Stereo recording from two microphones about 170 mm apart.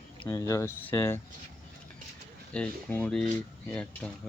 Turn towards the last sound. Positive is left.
turn(degrees=5)  # may be behind; listen again after turning